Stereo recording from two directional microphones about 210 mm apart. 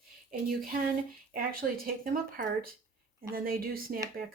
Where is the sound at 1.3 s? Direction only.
45° right (ahead or behind).